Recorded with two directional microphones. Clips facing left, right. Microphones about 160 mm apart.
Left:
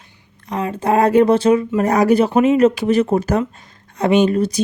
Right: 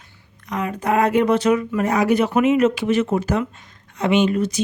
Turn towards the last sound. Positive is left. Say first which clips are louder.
# left 3 dB
turn(degrees=35)  # may be behind; listen again after turning